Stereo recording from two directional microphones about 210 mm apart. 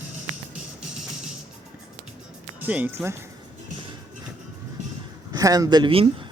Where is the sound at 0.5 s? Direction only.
5° right (ahead or behind).